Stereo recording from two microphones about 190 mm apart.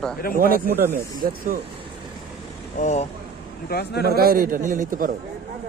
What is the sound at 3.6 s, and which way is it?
Speech, 55° left (ahead or behind).